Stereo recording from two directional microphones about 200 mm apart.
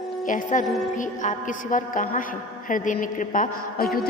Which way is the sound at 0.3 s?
40° left (ahead or behind).